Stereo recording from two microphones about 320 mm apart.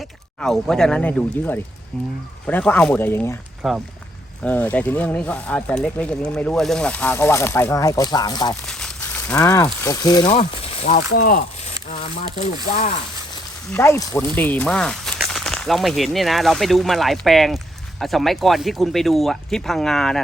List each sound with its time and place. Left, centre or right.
0.3 s speech: centre; by 11.4 s left
13.7 s speech: centre